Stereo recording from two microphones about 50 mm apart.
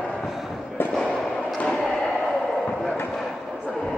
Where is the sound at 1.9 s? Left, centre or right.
Centre.